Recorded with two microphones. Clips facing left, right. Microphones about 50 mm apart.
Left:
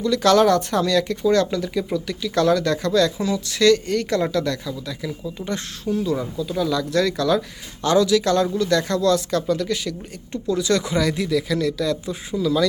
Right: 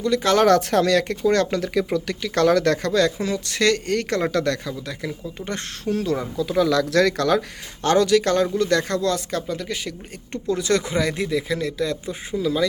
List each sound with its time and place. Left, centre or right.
0.3 s speech: right
2.9 s speech: right
6.6 s speech: right
10.3 s speech: right